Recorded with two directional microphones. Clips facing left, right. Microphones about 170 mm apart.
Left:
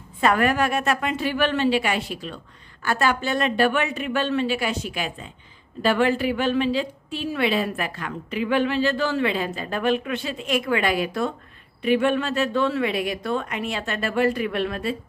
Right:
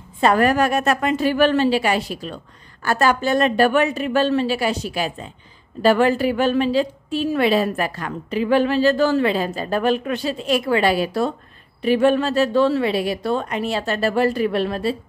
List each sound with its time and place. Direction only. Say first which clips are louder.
0.2 s a woman's voice: right 4 dB; 35° right (ahead or behind)